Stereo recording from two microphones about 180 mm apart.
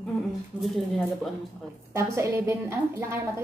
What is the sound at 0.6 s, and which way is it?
Speech, centre (ahead or behind).